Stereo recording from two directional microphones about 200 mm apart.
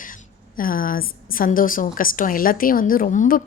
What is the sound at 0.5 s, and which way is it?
A woman's voice, 45° left (ahead or behind).